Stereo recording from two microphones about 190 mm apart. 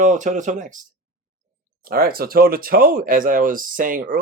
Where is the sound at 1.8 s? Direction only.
50° right (ahead or behind).